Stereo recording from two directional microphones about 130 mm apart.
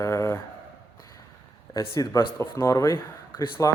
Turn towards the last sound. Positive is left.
turn(degrees=25)  # may be behind; listen again after turning